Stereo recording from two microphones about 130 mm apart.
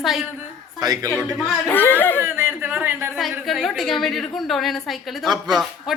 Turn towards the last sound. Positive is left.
turn(degrees=0)  # may be behind; listen again after turning